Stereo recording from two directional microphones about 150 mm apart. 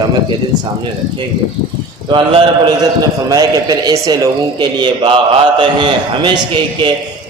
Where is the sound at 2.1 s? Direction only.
35° right (ahead or behind).